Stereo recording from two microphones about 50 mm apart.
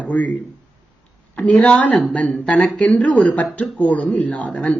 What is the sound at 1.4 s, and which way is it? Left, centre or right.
Speech, left.